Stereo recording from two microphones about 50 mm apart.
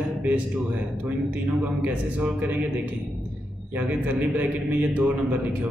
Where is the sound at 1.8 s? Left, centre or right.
Right.